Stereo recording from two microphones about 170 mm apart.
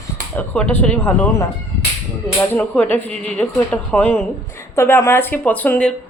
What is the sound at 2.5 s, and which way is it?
Speech, 10° left (ahead or behind).